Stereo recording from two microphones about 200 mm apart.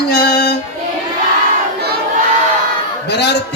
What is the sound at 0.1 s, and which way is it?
Music, 55° left (ahead or behind).